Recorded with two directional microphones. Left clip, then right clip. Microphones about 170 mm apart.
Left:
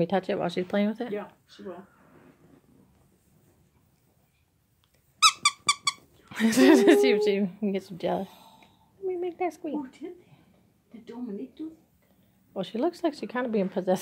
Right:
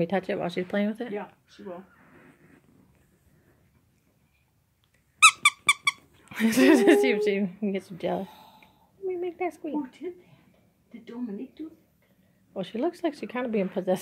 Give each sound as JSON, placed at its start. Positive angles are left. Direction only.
{"t": 0.0, "sound": "speech", "side_deg": 5}
{"t": 5.4, "sound": "squeak", "side_deg": 15}
{"t": 6.2, "sound": "a woman's voice", "side_deg": 0}
{"t": 12.5, "sound": "a woman's voice", "side_deg": 5}